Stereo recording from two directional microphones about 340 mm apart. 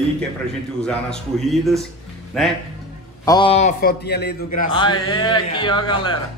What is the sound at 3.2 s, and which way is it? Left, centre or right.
A man's voice, centre.